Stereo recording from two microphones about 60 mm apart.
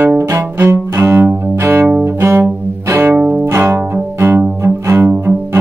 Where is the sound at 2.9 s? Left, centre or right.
Right.